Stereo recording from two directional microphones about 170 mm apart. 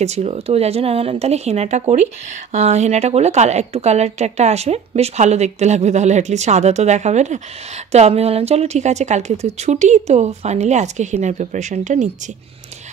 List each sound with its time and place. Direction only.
0.0 s speech: 40° right (ahead or behind)